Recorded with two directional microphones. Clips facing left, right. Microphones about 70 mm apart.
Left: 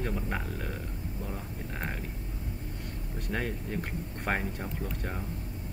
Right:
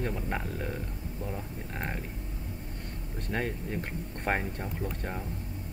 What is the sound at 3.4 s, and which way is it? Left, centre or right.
Speech, centre.